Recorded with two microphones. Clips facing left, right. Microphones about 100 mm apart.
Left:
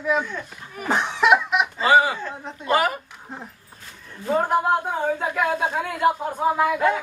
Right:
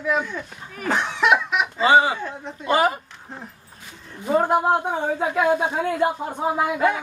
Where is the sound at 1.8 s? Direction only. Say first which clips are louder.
Right 2 dB; 20° right (ahead or behind).